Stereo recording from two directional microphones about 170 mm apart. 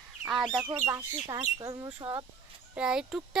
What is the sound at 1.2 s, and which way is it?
Speech, 20° right (ahead or behind).